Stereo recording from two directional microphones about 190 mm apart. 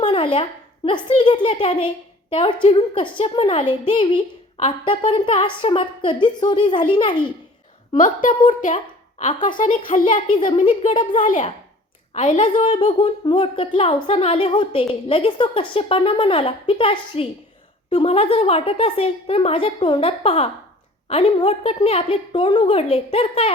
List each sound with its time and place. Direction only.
0.0 s a sound: 25° left (ahead or behind)
0.9 s a woman's voice: 25° left (ahead or behind)
7.9 s a woman's voice: 45° left (ahead or behind)
10.2 s a woman's voice: 25° left (ahead or behind)